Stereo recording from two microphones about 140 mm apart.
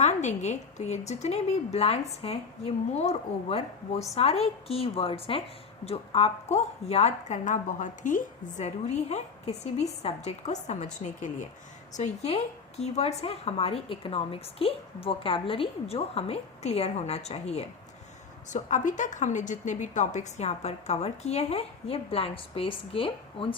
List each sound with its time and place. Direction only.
0.0 s a woman's voice: 55° left (ahead or behind)
18.5 s a woman's voice: 60° left (ahead or behind); by 23.6 s 40° left (ahead or behind)